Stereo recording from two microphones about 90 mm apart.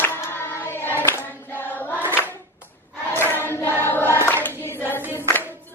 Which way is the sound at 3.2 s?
25° right (ahead or behind).